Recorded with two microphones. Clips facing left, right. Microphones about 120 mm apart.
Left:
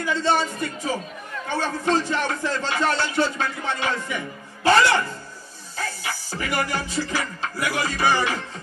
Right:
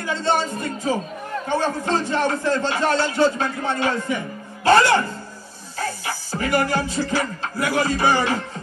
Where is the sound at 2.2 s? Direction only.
45° right (ahead or behind).